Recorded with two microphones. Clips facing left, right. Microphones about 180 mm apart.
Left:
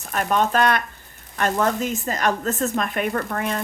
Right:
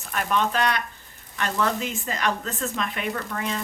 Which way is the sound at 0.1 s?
45° left (ahead or behind).